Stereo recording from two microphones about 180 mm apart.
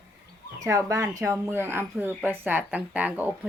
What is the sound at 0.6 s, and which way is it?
Speech, 15° right (ahead or behind).